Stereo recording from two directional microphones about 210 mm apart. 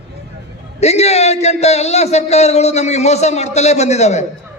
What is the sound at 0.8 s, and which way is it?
A man's voice, 30° left (ahead or behind).